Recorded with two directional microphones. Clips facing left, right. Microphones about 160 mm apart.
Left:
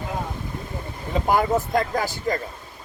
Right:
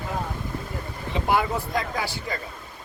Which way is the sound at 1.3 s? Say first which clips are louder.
Left 4 dB; 45° left (ahead or behind).